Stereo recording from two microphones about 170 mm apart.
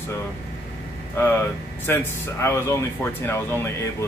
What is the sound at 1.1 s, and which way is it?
Speech, 15° left (ahead or behind).